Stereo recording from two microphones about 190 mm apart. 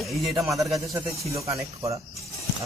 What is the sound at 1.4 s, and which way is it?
Speech, 15° right (ahead or behind).